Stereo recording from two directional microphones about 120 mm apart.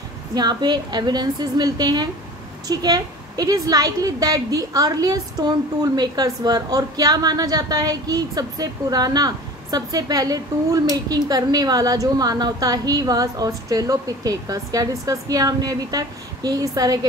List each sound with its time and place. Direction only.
0.3 s a woman's voice: 35° right (ahead or behind)